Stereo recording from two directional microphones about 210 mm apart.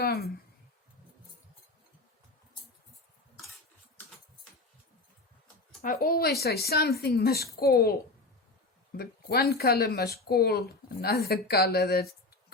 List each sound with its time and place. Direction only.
0.0 s a sound: 45° left (ahead or behind)
5.8 s speech: 45° left (ahead or behind)
9.0 s speech: 50° left (ahead or behind)